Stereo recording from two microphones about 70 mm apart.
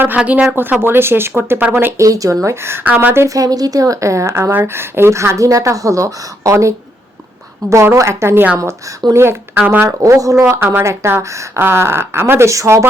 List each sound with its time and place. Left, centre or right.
0.2 s speech: centre
0.5 s speech: right
2.0 s speech: right
3.2 s speech: right
7.6 s a woman's voice: right
7.9 s speech: right
9.8 s speech: right